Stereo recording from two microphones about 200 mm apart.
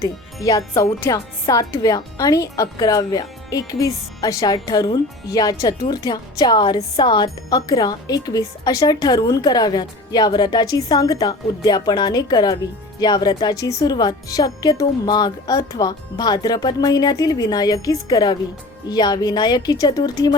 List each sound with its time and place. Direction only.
0.4 s speech: 20° left (ahead or behind)